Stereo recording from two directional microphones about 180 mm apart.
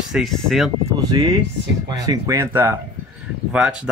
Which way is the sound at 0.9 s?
20° right (ahead or behind).